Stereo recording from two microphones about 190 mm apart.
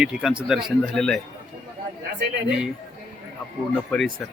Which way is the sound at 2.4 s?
5° right (ahead or behind).